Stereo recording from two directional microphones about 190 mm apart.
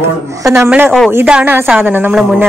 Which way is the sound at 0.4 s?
15° right (ahead or behind).